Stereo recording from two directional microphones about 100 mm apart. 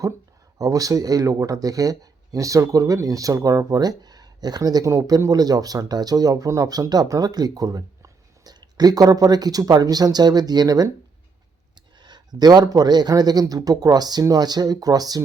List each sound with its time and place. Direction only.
0.6 s speech: 35° right (ahead or behind)